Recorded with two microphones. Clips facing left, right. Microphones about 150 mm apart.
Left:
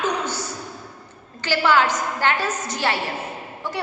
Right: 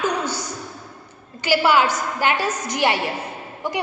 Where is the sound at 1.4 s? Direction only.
10° right (ahead or behind).